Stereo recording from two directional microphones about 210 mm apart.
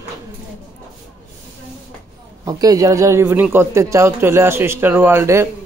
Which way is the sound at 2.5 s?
15° right (ahead or behind).